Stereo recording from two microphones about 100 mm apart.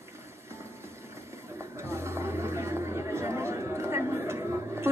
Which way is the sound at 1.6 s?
25° right (ahead or behind).